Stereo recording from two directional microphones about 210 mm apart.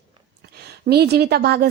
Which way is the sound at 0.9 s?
50° right (ahead or behind).